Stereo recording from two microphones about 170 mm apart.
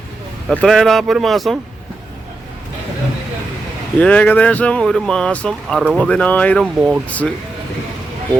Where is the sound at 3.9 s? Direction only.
5° left (ahead or behind).